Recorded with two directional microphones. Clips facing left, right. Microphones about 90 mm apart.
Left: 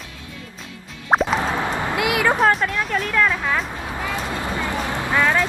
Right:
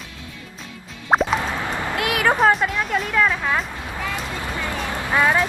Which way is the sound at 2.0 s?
90° left.